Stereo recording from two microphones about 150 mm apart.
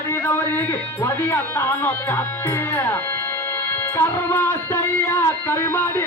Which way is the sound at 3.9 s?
15° left (ahead or behind).